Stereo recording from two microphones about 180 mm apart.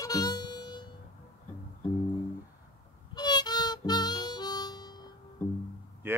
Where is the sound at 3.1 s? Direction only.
25° left (ahead or behind).